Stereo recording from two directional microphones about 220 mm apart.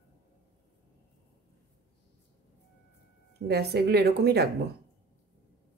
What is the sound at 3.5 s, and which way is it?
Speech, 45° right (ahead or behind).